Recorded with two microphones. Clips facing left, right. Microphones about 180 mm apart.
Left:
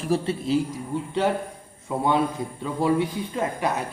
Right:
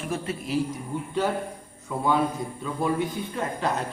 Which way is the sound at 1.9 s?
25° left (ahead or behind).